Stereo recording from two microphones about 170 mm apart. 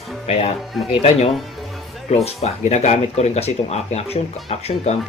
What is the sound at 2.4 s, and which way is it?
Speech, 40° left (ahead or behind).